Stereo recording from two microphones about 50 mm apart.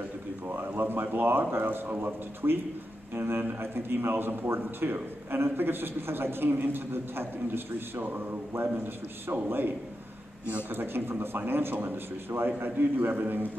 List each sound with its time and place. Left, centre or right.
0.5 s a man's voice: right
8.0 s a man's voice: right
12.4 s a man's voice: right